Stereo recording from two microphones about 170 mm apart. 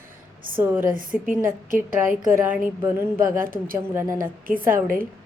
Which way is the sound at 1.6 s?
55° right (ahead or behind).